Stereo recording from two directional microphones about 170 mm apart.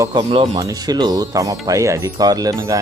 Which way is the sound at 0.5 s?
20° right (ahead or behind).